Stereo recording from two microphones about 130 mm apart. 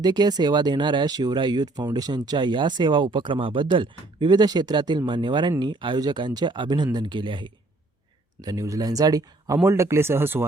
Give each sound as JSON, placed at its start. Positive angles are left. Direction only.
{"t": 0.0, "sound": "speech", "side_deg": -35}
{"t": 8.4, "sound": "speech", "side_deg": -25}